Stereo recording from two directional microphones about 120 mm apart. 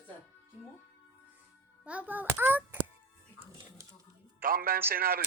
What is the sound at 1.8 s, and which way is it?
Speech, 10° right (ahead or behind).